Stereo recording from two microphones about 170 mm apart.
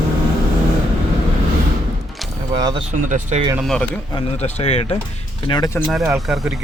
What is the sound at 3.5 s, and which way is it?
Speech, centre (ahead or behind).